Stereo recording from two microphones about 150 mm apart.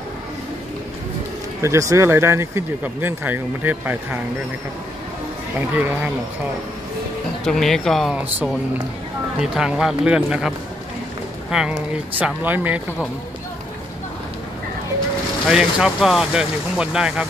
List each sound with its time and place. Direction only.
1.6 s speech: 20° right (ahead or behind)
7.4 s speech: centre (ahead or behind)
8.2 s speech: 10° right (ahead or behind)
11.5 s speech: 5° right (ahead or behind)
15.4 s speech: centre (ahead or behind)